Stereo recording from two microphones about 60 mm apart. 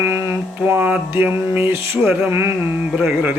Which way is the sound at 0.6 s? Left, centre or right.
Right.